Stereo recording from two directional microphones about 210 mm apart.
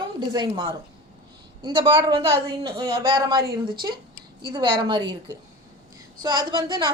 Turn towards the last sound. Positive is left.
turn(degrees=-20)  # may be behind; listen again after turning